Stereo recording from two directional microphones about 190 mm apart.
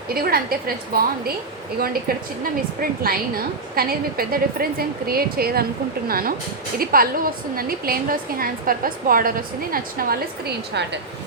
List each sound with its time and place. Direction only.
0.1 s a woman's voice: 50° right (ahead or behind)
1.8 s a woman's voice: 50° right (ahead or behind)